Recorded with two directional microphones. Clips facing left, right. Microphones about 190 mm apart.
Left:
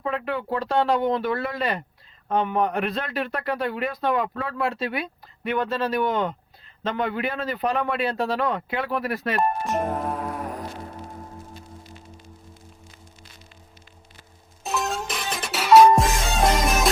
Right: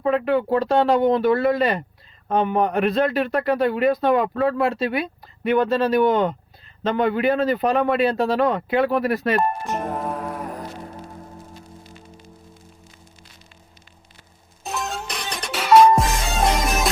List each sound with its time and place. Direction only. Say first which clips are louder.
0.0 s a man's voice: right 8 dB; 35° right (ahead or behind)
9.3 s music: right 2 dB; centre (ahead or behind)
14.6 s music: left 2 dB; centre (ahead or behind)